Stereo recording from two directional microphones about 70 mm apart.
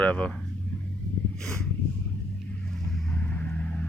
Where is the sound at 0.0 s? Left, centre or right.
Left.